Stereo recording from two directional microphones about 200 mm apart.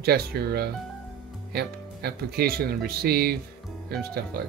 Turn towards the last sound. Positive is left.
turn(degrees=-50)  # may be behind; listen again after turning